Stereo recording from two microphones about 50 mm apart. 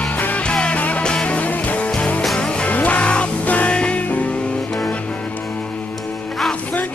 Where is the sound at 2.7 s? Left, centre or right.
Left.